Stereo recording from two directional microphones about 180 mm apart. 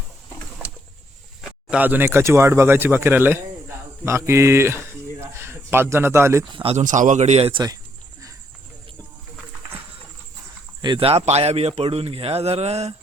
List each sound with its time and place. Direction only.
1.4 s speech: 5° right (ahead or behind)
6.6 s a man's voice: 35° right (ahead or behind)
10.8 s a man's voice: 30° right (ahead or behind)